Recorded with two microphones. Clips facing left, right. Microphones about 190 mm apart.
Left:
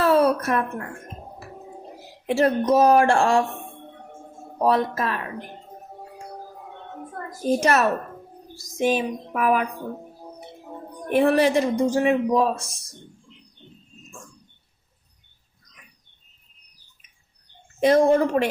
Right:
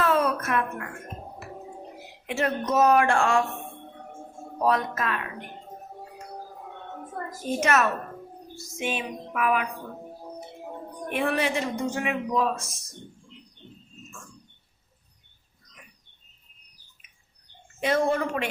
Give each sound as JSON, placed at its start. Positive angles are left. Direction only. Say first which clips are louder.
{"t": 0.0, "sound": "a sound", "louder": "left 5 dB", "side_deg": 35}
{"t": 2.2, "sound": "speech", "louder": "left 7 dB", "side_deg": 35}
{"t": 4.6, "sound": "speech", "louder": "left 4 dB", "side_deg": 30}
{"t": 7.4, "sound": "speech", "louder": "left 4 dB", "side_deg": 35}
{"t": 11.1, "sound": "speech", "louder": "left 8 dB", "side_deg": 40}
{"t": 17.7, "sound": "speech", "louder": "left 7 dB", "side_deg": 40}